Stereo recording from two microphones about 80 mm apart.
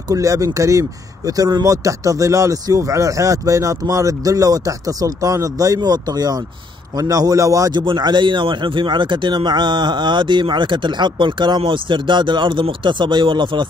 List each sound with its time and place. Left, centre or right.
0.1 s speech: right
7.7 s a man's voice: right